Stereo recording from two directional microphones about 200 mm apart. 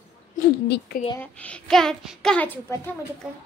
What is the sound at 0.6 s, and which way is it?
Speech, 55° left (ahead or behind).